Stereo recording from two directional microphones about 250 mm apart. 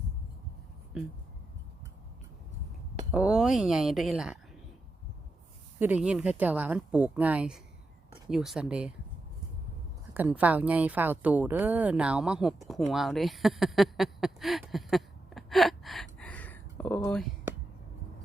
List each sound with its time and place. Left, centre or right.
3.1 s a woman's voice: centre
5.8 s a woman's voice: centre
10.2 s a woman's voice: centre